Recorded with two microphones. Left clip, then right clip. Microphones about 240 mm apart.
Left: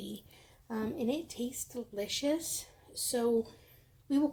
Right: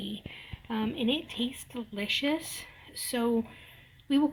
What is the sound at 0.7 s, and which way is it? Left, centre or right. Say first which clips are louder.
Speech: right 4 dB; right.